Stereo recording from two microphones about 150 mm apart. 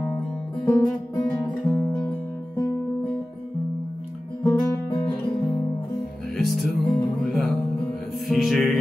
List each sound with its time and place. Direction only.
0.7 s music: 20° left (ahead or behind)
4.4 s guitar: 25° left (ahead or behind)
6.3 s music: centre (ahead or behind)